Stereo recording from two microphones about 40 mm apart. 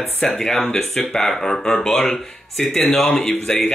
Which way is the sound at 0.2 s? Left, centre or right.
Centre.